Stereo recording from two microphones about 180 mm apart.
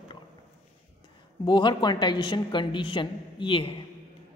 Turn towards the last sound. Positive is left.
turn(degrees=30)  # may be behind; listen again after turning